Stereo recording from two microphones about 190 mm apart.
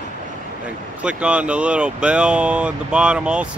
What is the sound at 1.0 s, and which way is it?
Speech, 5° right (ahead or behind).